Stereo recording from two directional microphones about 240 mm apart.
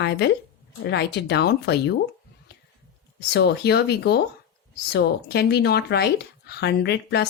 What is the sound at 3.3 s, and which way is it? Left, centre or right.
Speech, left.